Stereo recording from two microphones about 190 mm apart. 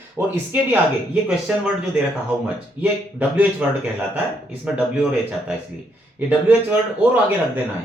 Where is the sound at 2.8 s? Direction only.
10° right (ahead or behind).